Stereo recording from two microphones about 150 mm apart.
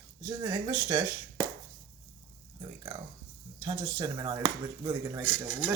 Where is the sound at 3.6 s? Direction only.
25° right (ahead or behind).